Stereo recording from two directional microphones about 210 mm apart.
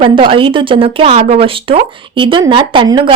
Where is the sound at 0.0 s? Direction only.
25° right (ahead or behind).